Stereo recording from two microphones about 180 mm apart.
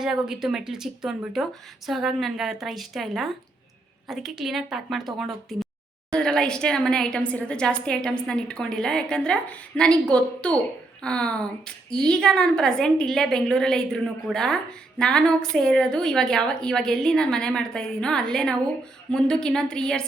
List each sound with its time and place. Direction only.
0.0 s a woman's voice: 5° right (ahead or behind)